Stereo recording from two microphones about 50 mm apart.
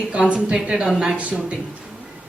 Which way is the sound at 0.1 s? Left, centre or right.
Right.